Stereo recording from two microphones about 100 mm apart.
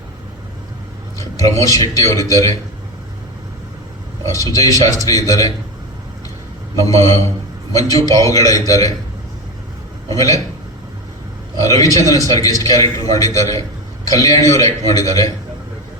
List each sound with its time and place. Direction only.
1.4 s a man's voice: 35° left (ahead or behind)
4.3 s a man's voice: 35° left (ahead or behind)
6.8 s a man's voice: 35° left (ahead or behind)
10.1 s a man's voice: 35° left (ahead or behind)
11.6 s a man's voice: 35° left (ahead or behind)